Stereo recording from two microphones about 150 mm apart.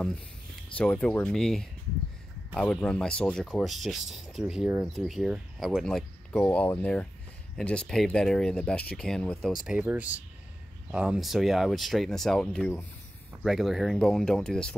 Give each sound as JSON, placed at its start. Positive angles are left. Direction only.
{"t": 0.7, "sound": "speech", "side_deg": 5}
{"t": 13.4, "sound": "speech", "side_deg": 0}